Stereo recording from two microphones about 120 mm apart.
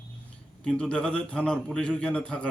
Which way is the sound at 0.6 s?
5° left (ahead or behind).